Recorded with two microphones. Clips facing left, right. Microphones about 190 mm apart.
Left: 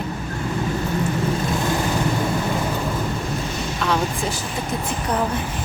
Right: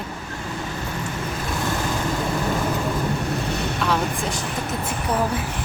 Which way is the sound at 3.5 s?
65° right (ahead or behind).